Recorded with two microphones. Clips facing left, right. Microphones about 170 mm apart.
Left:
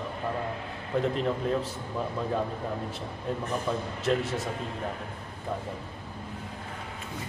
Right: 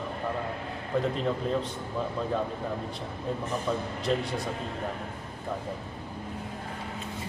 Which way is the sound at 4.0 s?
Centre (ahead or behind).